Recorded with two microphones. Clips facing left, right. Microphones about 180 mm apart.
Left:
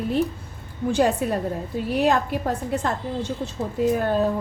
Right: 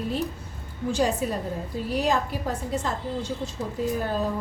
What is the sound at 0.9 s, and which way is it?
A woman's voice, 60° left (ahead or behind).